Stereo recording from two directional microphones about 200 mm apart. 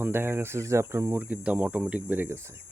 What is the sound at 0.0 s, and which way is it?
Speech, 10° right (ahead or behind).